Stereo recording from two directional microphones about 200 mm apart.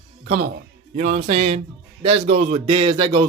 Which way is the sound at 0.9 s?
35° right (ahead or behind).